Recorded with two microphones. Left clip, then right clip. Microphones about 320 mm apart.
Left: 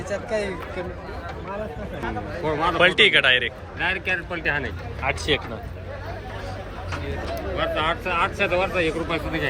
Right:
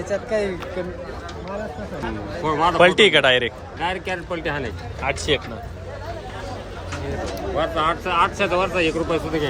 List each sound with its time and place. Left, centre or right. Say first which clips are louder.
0.1 s speech: right 3 dB; right
2.4 s speech: right 4 dB; right
7.5 s speech: right 3 dB; right